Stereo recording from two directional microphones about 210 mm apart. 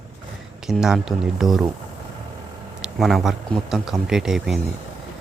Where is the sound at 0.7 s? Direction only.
Centre (ahead or behind).